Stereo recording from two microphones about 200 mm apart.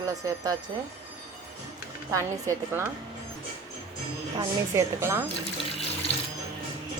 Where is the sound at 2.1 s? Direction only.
15° right (ahead or behind).